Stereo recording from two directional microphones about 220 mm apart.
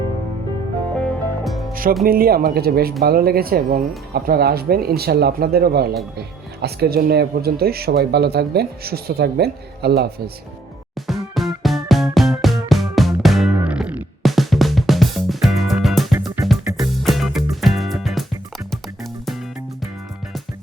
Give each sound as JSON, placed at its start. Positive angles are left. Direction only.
{"t": 0.9, "sound": "music", "side_deg": 0}
{"t": 1.7, "sound": "music", "side_deg": -40}
{"t": 2.0, "sound": "speech", "side_deg": -45}
{"t": 11.0, "sound": "music", "side_deg": 0}